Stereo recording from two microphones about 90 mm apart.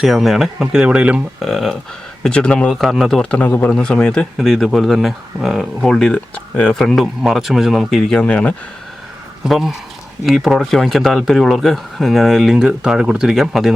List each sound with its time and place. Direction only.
0.0 s speech: centre (ahead or behind)
1.4 s a man's voice: centre (ahead or behind)
2.7 s speech: centre (ahead or behind)
3.2 s a man's voice: 15° left (ahead or behind)
4.4 s speech: 5° right (ahead or behind); by 6.8 s 15° left (ahead or behind)
6.8 s speech: centre (ahead or behind); by 8.5 s 15° left (ahead or behind)
9.4 s speech: 5° right (ahead or behind)